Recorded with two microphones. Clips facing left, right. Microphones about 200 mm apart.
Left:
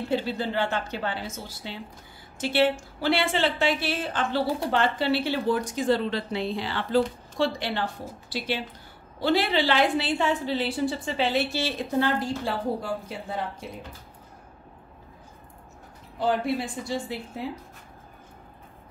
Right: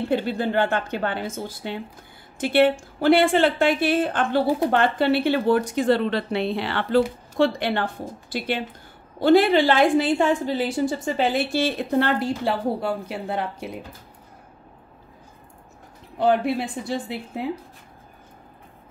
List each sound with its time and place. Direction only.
0.1 s a woman's voice: 55° right (ahead or behind)
16.2 s a woman's voice: 60° right (ahead or behind)